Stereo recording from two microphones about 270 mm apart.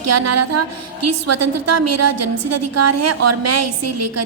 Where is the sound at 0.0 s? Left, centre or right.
Right.